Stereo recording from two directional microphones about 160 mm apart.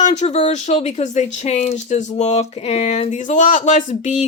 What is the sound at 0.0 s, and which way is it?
Speech, 45° left (ahead or behind).